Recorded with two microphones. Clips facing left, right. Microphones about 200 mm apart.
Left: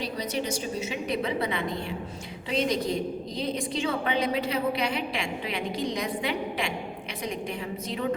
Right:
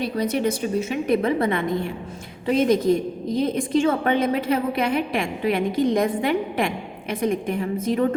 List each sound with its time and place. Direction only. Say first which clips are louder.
0.0 s a woman's voice: right 8 dB; 55° right (ahead or behind)